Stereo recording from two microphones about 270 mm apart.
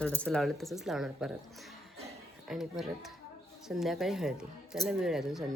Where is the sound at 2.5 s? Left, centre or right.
Centre.